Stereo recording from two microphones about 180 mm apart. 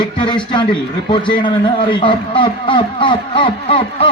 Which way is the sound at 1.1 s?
25° left (ahead or behind).